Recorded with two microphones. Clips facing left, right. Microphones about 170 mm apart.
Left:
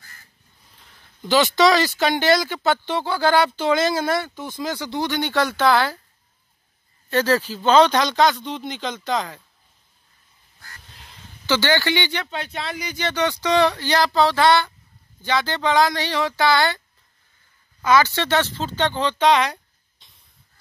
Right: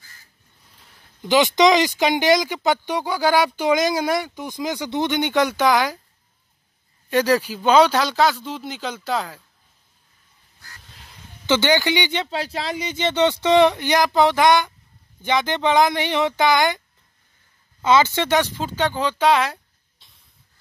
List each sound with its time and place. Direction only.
1.2 s speech: 15° right (ahead or behind)
7.1 s speech: 15° right (ahead or behind)
11.4 s speech: 20° right (ahead or behind)
12.3 s speech: 30° right (ahead or behind)
17.8 s speech: 20° right (ahead or behind); by 20.1 s 5° right (ahead or behind)